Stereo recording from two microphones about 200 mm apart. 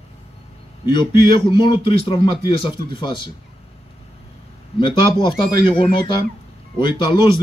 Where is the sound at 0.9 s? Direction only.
25° left (ahead or behind).